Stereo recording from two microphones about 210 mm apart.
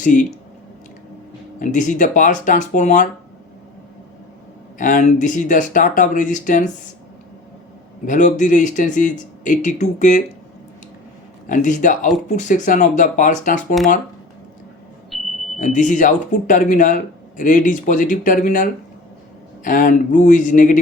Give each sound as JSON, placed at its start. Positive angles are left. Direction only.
{"t": 0.0, "sound": "speech", "side_deg": 40}
{"t": 1.5, "sound": "speech", "side_deg": 35}
{"t": 4.8, "sound": "speech", "side_deg": 40}
{"t": 8.0, "sound": "speech", "side_deg": 35}
{"t": 11.4, "sound": "speech", "side_deg": 35}
{"t": 15.1, "sound": "a sound", "side_deg": 0}
{"t": 15.5, "sound": "speech", "side_deg": 35}